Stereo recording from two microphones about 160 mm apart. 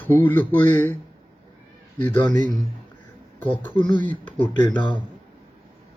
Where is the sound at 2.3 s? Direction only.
55° right (ahead or behind).